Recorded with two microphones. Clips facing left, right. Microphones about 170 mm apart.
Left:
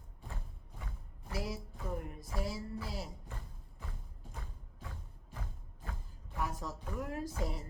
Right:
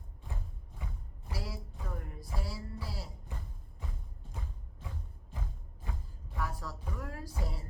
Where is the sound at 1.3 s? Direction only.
20° left (ahead or behind).